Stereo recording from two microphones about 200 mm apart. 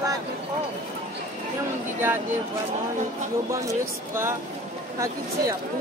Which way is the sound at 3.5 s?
15° right (ahead or behind).